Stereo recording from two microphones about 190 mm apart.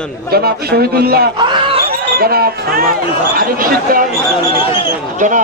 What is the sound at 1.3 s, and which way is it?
Speech, 25° right (ahead or behind).